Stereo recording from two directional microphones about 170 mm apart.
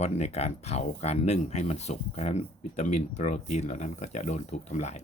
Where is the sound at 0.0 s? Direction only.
40° left (ahead or behind).